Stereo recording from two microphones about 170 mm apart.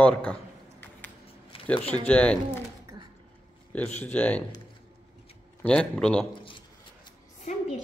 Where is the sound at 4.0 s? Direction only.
10° left (ahead or behind).